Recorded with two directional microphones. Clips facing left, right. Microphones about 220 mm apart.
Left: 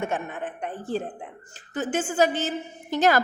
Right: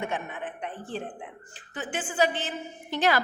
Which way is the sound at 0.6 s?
40° left (ahead or behind).